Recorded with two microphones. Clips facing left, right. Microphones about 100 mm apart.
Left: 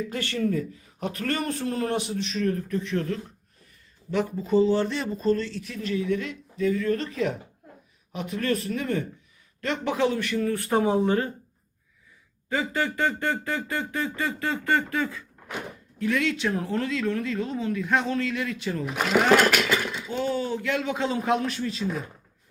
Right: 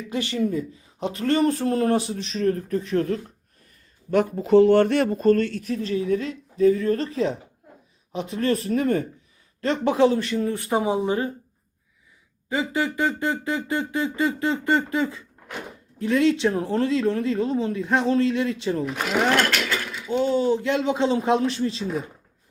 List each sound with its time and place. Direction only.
0.1 s speech: 15° right (ahead or behind); by 3.2 s 40° right (ahead or behind)
4.1 s speech: 60° right (ahead or behind)
5.6 s speech: 35° right (ahead or behind)
10.3 s speech: 20° right (ahead or behind)
12.5 s speech: 15° right (ahead or behind)
18.9 s speech: 5° left (ahead or behind)
20.1 s speech: 25° right (ahead or behind)